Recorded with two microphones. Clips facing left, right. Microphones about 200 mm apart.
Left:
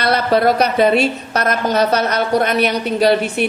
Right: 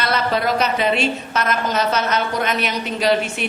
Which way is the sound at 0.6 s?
40° left (ahead or behind).